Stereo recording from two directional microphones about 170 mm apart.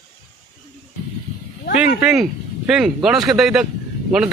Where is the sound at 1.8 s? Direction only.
5° right (ahead or behind).